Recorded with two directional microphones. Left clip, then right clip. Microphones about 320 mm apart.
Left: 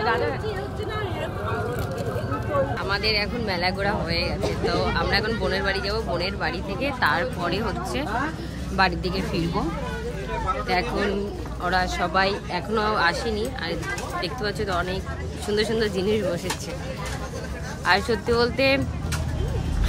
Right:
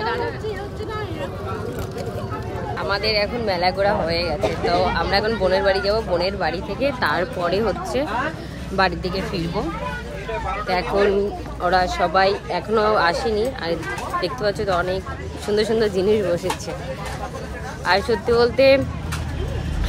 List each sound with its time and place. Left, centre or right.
2.8 s speech: centre
11.6 s speech: centre
17.8 s speech: centre